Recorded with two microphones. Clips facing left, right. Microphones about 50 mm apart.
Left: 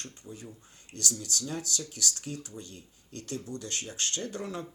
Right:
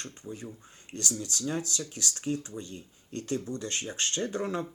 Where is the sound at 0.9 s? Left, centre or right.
Right.